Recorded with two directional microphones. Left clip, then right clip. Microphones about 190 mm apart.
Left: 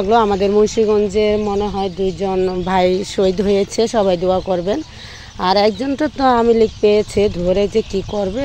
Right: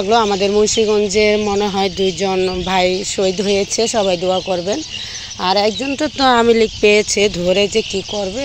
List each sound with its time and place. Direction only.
0.0 s speech: 10° left (ahead or behind)